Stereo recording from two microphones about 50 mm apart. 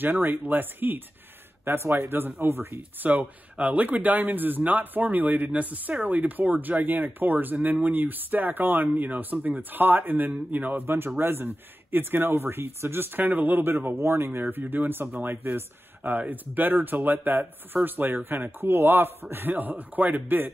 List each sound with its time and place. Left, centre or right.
0.0 s speech: right
1.6 s speech: right
2.4 s speech: right
3.0 s speech: right
14.4 s speech: right